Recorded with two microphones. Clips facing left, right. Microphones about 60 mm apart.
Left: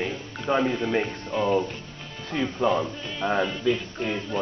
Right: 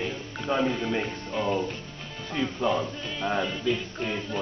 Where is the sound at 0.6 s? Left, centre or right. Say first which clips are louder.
Left 2 dB; centre.